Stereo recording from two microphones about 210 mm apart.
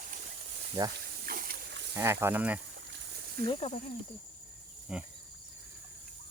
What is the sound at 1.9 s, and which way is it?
Speech, 10° right (ahead or behind).